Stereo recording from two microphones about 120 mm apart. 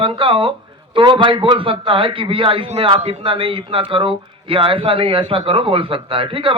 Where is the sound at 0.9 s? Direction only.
45° right (ahead or behind).